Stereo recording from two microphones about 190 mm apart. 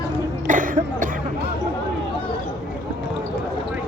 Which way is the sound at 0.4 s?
45° right (ahead or behind).